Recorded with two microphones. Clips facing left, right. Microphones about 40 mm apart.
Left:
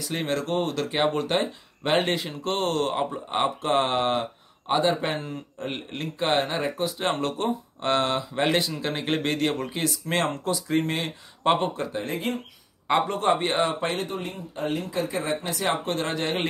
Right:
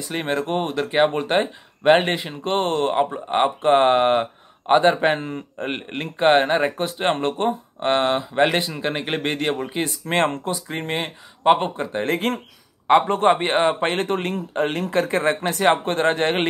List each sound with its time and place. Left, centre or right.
0.1 s speech: right
9.8 s a man's voice: right
10.5 s speech: right
12.0 s speech: right
12.8 s a man's voice: right
13.9 s speech: right